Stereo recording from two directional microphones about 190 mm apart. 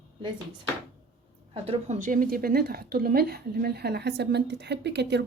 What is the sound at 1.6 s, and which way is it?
Speech, 35° right (ahead or behind).